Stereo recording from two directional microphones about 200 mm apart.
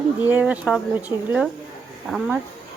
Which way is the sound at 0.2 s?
10° right (ahead or behind).